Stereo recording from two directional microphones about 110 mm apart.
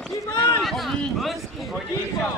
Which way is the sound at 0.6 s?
Centre (ahead or behind).